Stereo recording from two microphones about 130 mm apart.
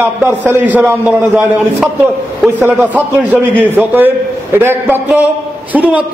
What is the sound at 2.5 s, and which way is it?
Speech, 15° right (ahead or behind).